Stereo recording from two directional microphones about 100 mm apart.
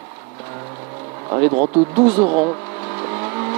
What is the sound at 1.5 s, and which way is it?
Speech, 20° right (ahead or behind).